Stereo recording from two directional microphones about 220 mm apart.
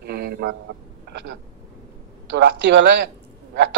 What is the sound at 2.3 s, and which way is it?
Speech, 50° right (ahead or behind).